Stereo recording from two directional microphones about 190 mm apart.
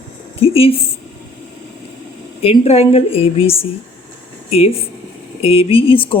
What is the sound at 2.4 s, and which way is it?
A woman's voice, 30° left (ahead or behind).